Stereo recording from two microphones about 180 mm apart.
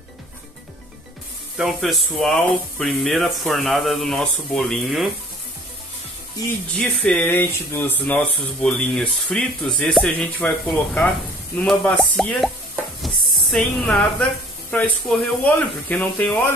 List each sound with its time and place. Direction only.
1.6 s speech: centre (ahead or behind)
6.4 s speech: 20° left (ahead or behind)
6.7 s speech: 5° left (ahead or behind)
13.0 s a sound: centre (ahead or behind)
14.7 s speech: 10° left (ahead or behind)